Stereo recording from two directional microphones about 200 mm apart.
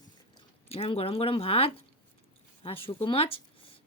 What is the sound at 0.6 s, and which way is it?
Speech, 30° left (ahead or behind).